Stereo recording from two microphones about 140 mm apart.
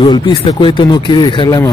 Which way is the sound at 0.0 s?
30° left (ahead or behind).